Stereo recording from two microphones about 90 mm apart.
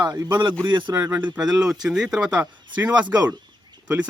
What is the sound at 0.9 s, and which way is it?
Speech, 30° right (ahead or behind).